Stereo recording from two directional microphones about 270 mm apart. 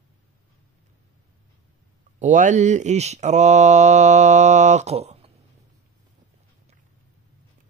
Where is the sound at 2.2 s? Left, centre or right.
Right.